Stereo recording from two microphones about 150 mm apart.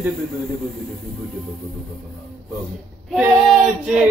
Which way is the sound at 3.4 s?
Centre (ahead or behind).